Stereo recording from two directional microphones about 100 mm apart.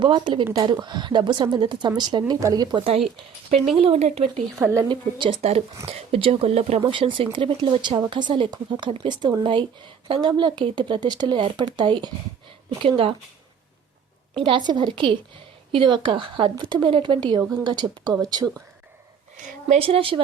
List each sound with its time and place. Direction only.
0.0 s a woman's voice: 55° right (ahead or behind); by 2.8 s 40° right (ahead or behind)
3.8 s speech: 80° right
4.6 s a woman's voice: 25° right (ahead or behind)
4.9 s a woman's voice: 55° right (ahead or behind)
5.4 s speech: 90° right
6.0 s a woman's voice: 75° right (ahead or behind); by 12.1 s 50° right (ahead or behind)
14.3 s a woman's voice: 60° right (ahead or behind); by 18.5 s 40° right (ahead or behind)
19.8 s speech: 70° right (ahead or behind)